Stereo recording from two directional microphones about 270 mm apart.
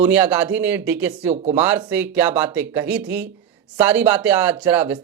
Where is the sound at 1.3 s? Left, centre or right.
Right.